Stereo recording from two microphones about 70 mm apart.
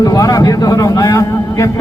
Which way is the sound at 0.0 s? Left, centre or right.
Left.